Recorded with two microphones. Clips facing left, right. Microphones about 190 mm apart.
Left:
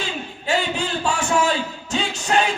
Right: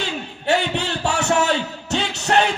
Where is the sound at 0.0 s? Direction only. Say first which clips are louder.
Right 2 dB; 65° right (ahead or behind).